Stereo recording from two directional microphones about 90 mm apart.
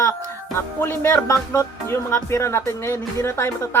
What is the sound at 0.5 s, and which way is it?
Speech, 30° left (ahead or behind).